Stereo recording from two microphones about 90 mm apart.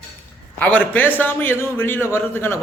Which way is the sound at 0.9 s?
20° left (ahead or behind).